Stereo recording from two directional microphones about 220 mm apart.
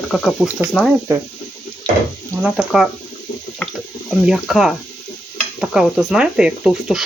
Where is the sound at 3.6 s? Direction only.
5° left (ahead or behind).